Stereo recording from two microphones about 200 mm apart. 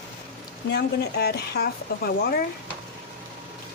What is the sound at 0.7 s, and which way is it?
Speech, 55° left (ahead or behind).